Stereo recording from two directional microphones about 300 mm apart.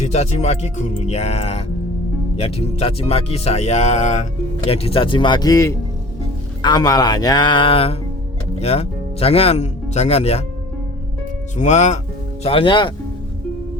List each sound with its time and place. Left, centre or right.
0.0 s speech: left
11.5 s speech: left